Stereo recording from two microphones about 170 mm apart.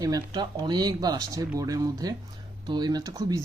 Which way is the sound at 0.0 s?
25° right (ahead or behind).